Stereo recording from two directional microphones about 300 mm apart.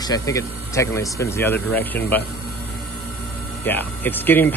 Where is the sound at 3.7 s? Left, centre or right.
Centre.